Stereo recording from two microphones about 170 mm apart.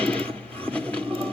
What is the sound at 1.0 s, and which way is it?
Wood, 30° right (ahead or behind).